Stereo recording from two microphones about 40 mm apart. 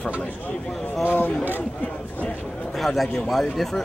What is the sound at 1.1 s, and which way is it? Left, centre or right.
Speech, left.